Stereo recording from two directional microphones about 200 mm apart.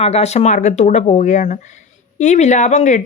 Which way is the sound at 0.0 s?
30° left (ahead or behind).